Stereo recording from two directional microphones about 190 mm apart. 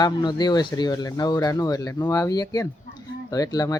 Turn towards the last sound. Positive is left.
turn(degrees=20)  # may be behind; listen again after turning